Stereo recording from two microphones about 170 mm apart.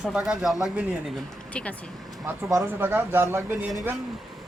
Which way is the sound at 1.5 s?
10° left (ahead or behind).